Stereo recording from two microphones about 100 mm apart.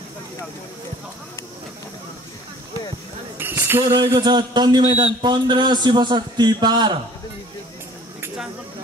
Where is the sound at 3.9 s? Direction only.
40° right (ahead or behind).